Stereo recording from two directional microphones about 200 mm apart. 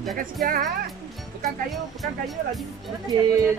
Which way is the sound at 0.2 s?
45° right (ahead or behind).